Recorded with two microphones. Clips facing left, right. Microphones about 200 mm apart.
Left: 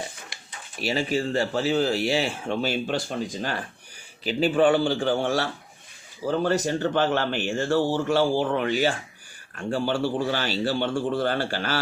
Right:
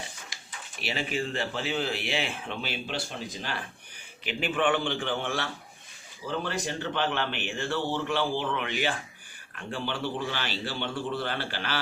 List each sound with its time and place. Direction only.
0.8 s speech: 40° left (ahead or behind)
4.2 s speech: 35° left (ahead or behind)